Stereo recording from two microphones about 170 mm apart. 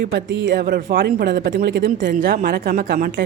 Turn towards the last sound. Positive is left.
turn(degrees=-55)  # may be behind; listen again after turning